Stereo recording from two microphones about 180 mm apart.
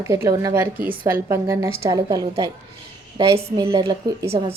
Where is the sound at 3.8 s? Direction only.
20° right (ahead or behind).